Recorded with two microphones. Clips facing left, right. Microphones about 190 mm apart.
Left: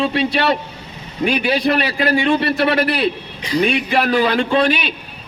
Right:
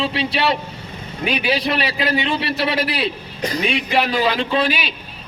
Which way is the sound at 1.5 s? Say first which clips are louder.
Left 3 dB; 55° left (ahead or behind).